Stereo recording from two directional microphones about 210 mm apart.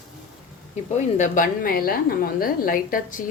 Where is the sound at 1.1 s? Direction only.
40° left (ahead or behind).